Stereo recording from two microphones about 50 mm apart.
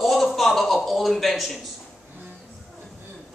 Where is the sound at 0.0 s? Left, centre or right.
Centre.